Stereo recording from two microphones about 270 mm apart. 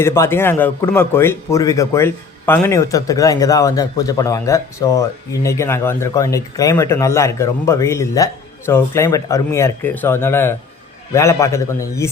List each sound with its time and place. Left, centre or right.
0.0 s a man's voice: centre